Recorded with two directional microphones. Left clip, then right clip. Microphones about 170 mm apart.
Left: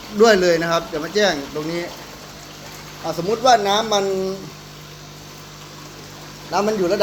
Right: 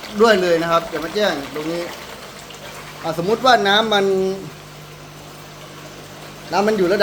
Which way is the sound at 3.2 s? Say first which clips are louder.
Right 1 dB; 15° right (ahead or behind).